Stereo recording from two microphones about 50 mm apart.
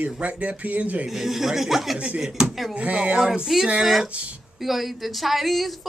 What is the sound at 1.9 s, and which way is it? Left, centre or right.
Speech, right.